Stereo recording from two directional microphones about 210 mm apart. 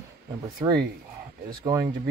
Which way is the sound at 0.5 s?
20° right (ahead or behind).